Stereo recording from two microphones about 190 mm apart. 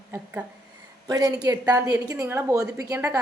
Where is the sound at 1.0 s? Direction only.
20° right (ahead or behind).